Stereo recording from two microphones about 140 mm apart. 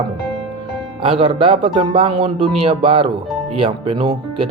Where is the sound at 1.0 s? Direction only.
40° right (ahead or behind).